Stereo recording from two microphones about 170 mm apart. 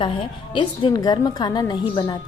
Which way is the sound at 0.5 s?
25° left (ahead or behind).